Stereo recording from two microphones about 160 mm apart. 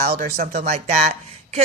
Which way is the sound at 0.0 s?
70° right (ahead or behind).